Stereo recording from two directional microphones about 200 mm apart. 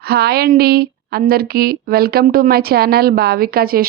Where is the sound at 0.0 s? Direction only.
55° right (ahead or behind).